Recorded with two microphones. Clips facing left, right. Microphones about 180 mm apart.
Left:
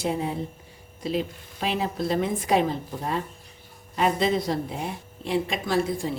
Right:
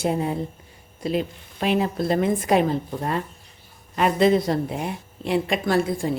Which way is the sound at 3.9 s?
60° right (ahead or behind).